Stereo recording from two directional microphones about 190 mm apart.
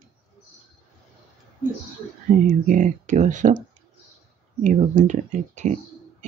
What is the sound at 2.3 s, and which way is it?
Speech, 40° right (ahead or behind).